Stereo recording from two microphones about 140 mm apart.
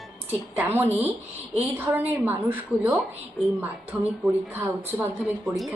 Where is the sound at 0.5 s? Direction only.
15° right (ahead or behind).